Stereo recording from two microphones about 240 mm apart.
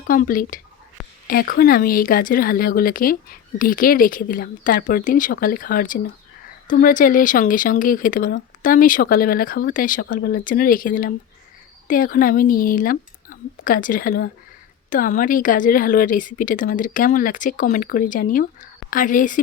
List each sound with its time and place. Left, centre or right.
0.1 s speech: left